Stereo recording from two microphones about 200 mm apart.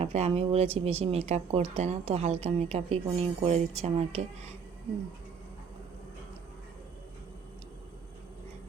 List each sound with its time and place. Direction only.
0.0 s speech: 30° right (ahead or behind)